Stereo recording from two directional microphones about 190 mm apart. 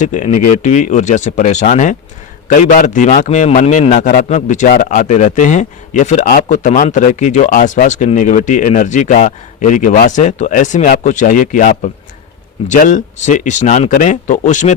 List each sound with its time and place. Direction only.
0.0 s a man's voice: 40° left (ahead or behind)